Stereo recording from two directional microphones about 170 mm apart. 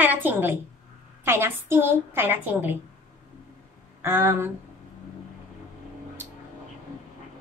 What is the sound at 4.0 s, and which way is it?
Speech, 15° right (ahead or behind).